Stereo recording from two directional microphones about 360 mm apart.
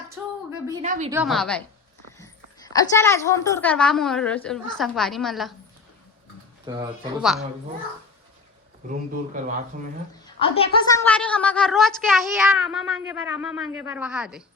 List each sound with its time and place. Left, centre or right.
0.2 s a sound: centre
0.5 s a woman's voice: centre
1.1 s a child's voice: centre
6.7 s speech: centre
7.2 s a child's voice: centre
8.9 s speech: right
10.2 s a woman's voice: centre